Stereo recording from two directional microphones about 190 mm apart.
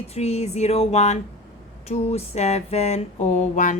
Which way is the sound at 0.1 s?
35° left (ahead or behind).